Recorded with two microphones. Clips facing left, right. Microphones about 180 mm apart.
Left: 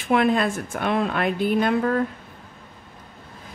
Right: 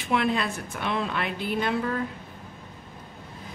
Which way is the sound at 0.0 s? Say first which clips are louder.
Left 6 dB; 50° left (ahead or behind).